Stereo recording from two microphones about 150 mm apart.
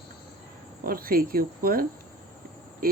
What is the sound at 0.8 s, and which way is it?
Speech, 75° right (ahead or behind).